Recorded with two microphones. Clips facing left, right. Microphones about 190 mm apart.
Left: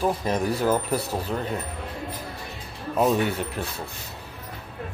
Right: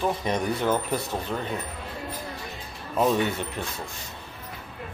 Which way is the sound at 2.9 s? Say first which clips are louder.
Left 1 dB; 5° left (ahead or behind).